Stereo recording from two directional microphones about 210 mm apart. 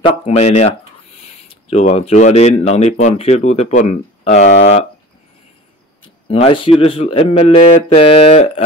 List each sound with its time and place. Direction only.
0.0 s speech: 30° left (ahead or behind)
1.5 s a sound: 30° left (ahead or behind)
2.0 s speech: 30° left (ahead or behind)
6.0 s speech: 25° left (ahead or behind)